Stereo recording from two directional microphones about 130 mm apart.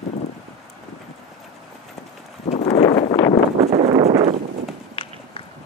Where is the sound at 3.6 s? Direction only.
55° right (ahead or behind).